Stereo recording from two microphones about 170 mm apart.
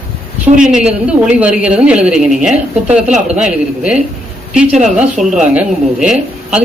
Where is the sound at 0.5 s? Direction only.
20° right (ahead or behind).